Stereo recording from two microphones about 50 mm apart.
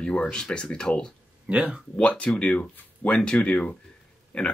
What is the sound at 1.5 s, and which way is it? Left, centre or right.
Speech, right.